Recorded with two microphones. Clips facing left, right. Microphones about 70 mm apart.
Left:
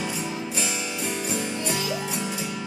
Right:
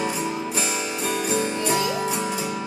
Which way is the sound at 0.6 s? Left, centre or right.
Right.